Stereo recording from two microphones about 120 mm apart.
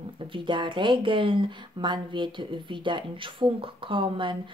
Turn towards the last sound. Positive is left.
turn(degrees=-45)  # may be behind; listen again after turning